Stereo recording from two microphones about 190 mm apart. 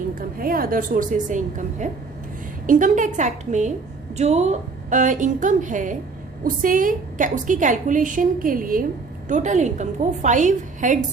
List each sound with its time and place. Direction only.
0.2 s a woman's voice: 50° right (ahead or behind)